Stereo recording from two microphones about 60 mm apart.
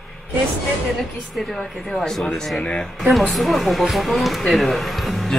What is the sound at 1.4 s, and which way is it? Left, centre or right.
Speech, centre.